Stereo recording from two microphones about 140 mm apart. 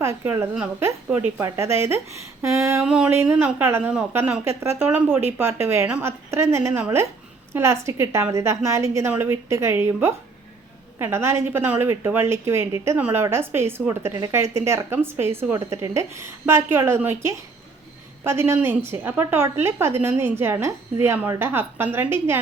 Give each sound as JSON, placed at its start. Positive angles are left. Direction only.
{"t": 0.0, "sound": "a woman's voice", "side_deg": -20}
{"t": 2.8, "sound": "a woman's voice", "side_deg": -5}